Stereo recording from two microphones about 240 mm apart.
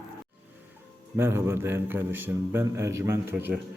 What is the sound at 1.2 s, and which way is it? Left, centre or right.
Speech, centre.